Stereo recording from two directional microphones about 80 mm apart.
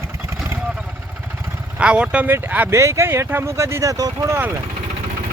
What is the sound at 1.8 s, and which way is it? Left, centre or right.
Speech, centre.